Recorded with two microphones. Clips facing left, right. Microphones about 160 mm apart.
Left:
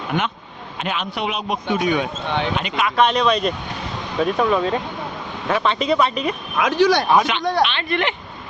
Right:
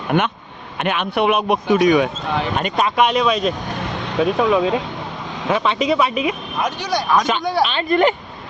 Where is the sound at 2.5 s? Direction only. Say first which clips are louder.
Right 3 dB; 45° right (ahead or behind).